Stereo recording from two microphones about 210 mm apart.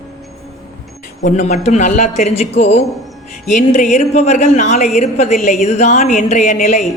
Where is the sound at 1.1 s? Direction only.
35° left (ahead or behind).